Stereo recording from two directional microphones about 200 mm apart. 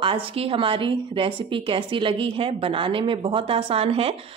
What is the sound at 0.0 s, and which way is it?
A woman's voice, 25° right (ahead or behind).